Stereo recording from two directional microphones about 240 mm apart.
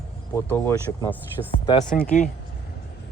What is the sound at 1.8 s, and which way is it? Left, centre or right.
Speech, left.